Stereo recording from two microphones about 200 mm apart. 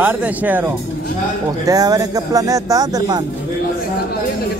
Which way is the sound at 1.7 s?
20° right (ahead or behind).